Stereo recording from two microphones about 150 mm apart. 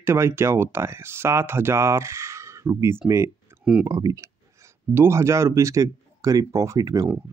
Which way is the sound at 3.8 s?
25° right (ahead or behind).